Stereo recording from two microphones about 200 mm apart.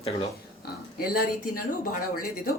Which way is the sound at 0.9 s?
45° left (ahead or behind).